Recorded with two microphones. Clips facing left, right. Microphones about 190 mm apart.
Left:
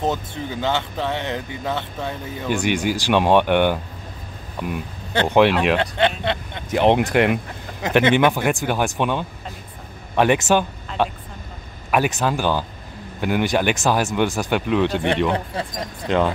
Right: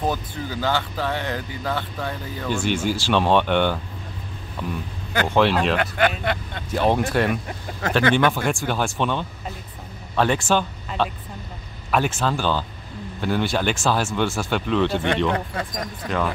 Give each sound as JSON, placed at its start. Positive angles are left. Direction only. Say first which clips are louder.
{"t": 0.0, "sound": "speech", "louder": "left 2 dB", "side_deg": 25}
{"t": 5.1, "sound": "speech", "louder": "left 3 dB", "side_deg": 25}
{"t": 5.4, "sound": "speech", "louder": "left 3 dB", "side_deg": 10}
{"t": 5.8, "sound": "speech", "louder": "left 1 dB", "side_deg": 25}
{"t": 15.3, "sound": "speech", "louder": "left 1 dB", "side_deg": 25}